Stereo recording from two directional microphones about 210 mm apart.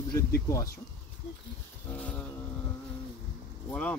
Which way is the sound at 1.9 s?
5° left (ahead or behind).